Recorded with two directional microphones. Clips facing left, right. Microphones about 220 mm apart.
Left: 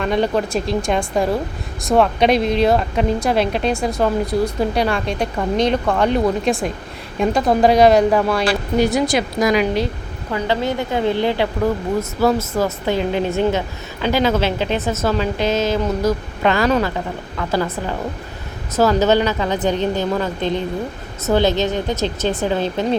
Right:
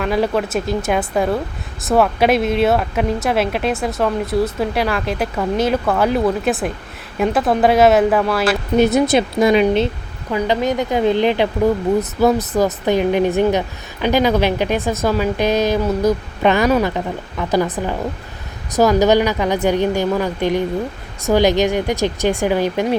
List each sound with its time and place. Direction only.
0.0 s speech: 5° right (ahead or behind)
8.8 s a woman's voice: 20° right (ahead or behind)